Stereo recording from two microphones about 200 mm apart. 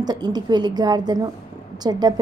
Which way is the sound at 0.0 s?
20° right (ahead or behind).